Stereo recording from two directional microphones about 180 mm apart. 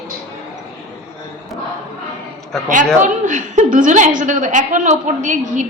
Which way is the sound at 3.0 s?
45° right (ahead or behind).